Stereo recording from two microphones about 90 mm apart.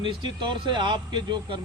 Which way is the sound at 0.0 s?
60° right (ahead or behind).